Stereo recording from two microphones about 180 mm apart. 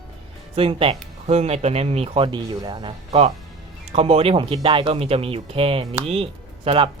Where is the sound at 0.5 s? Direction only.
30° right (ahead or behind).